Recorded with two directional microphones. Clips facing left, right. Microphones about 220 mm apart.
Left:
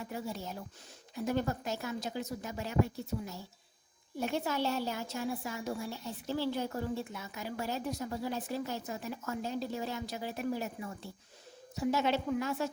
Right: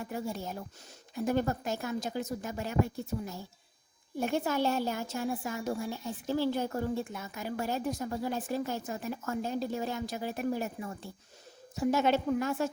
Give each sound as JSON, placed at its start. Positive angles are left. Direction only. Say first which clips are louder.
{"t": 0.0, "sound": "a woman's voice", "louder": "right 3 dB", "side_deg": -50}
{"t": 11.7, "sound": "a woman's voice", "louder": "right 3 dB", "side_deg": -50}